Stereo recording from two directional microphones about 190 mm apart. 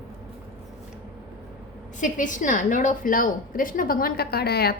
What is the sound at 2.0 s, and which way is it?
A woman's voice, 40° left (ahead or behind).